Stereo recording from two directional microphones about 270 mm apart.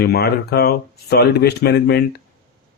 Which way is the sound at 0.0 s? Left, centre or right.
Left.